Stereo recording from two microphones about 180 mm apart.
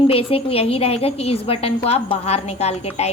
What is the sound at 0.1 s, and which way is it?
A woman's voice, 30° left (ahead or behind).